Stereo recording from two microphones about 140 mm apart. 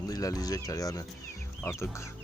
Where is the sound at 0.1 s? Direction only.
25° left (ahead or behind).